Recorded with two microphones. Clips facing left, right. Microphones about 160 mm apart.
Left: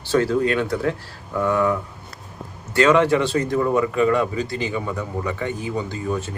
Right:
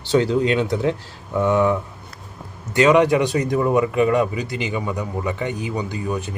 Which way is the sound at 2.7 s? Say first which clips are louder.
Right 1 dB; 20° right (ahead or behind).